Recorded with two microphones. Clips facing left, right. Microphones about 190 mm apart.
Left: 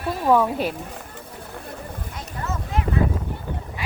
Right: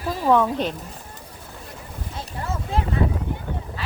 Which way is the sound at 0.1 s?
5° left (ahead or behind).